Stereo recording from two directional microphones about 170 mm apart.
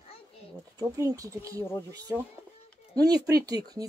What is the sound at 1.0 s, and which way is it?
Speech, 20° right (ahead or behind).